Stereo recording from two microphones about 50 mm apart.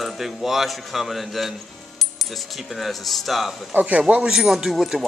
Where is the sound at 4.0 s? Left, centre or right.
Right.